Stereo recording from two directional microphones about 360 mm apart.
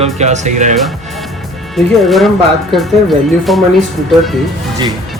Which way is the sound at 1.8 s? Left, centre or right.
Centre.